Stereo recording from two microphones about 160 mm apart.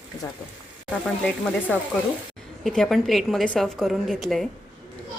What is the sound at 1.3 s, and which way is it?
A woman's voice, 10° left (ahead or behind).